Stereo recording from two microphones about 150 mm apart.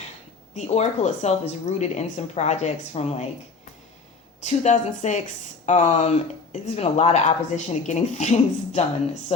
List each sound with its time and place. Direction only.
0.5 s speech: 50° left (ahead or behind)
4.4 s speech: 50° left (ahead or behind)